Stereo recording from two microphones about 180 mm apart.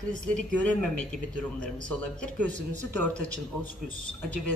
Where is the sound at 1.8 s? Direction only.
5° left (ahead or behind).